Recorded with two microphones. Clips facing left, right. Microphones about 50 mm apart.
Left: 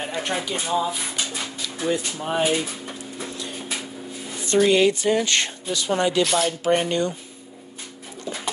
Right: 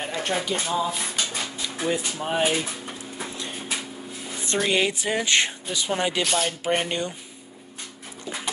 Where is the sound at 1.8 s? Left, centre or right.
Centre.